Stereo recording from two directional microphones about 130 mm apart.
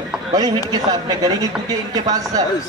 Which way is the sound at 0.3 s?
30° right (ahead or behind).